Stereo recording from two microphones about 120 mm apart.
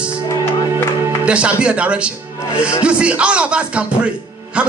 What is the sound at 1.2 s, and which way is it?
Music, 10° right (ahead or behind).